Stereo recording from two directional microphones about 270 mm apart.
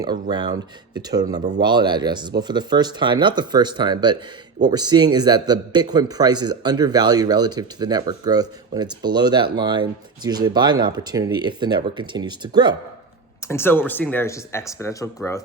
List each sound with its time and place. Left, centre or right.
0.0 s a man's voice: centre
1.4 s a man's voice: right
1.6 s a man's voice: centre
13.5 s speech: centre